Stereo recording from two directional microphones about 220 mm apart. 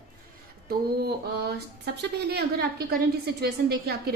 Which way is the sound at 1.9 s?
50° right (ahead or behind).